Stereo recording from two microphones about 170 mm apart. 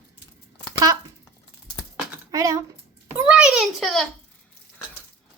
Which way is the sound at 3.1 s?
10° right (ahead or behind).